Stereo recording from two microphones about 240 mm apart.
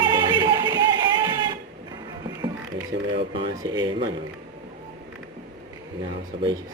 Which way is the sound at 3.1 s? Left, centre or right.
Right.